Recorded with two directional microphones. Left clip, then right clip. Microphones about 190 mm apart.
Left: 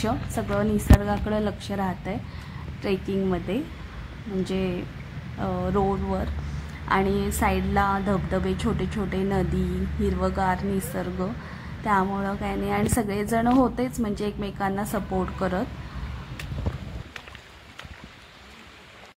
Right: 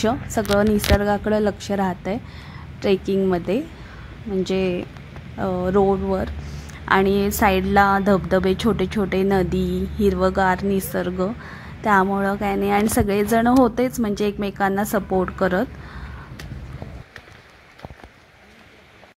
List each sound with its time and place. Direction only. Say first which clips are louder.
0.0 s a woman's voice: right 6 dB; 30° right (ahead or behind)